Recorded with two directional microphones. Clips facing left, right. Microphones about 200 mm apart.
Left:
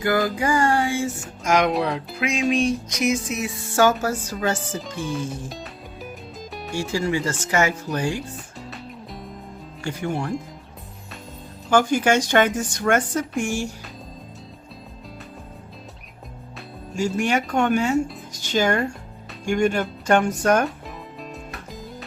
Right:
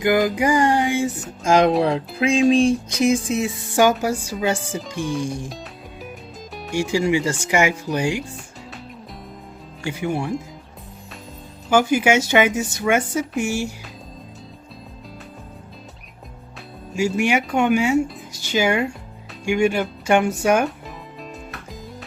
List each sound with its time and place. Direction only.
0.0 s speech: 15° right (ahead or behind)
1.5 s music: 30° right (ahead or behind)
3.8 s speech: 15° right (ahead or behind)
5.5 s music: centre (ahead or behind)
6.9 s speech: 15° right (ahead or behind)
9.8 s speech: 10° right (ahead or behind)
11.7 s speech: 10° right (ahead or behind)
16.9 s speech: 5° right (ahead or behind)
21.2 s music: centre (ahead or behind)